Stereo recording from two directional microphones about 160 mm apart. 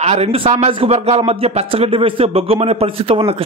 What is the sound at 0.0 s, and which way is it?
A man's voice, 40° right (ahead or behind).